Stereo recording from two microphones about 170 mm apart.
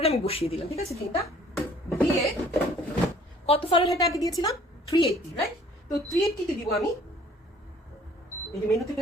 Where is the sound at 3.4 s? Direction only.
35° left (ahead or behind).